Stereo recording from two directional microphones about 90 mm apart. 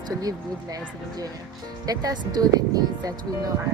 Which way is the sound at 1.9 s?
45° right (ahead or behind).